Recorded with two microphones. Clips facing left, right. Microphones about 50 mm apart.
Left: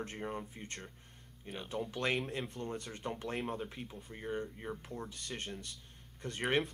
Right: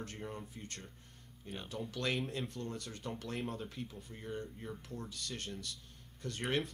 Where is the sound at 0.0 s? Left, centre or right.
Left.